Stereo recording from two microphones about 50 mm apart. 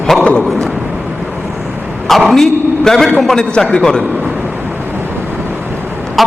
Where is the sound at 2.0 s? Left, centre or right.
Centre.